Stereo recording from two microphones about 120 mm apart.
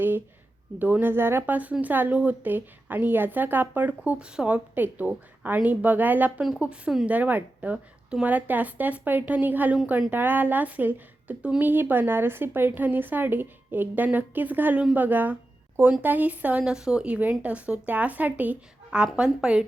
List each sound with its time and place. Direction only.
0.8 s speech: 15° right (ahead or behind)